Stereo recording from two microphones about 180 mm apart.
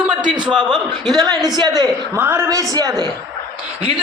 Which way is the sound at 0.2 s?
25° right (ahead or behind).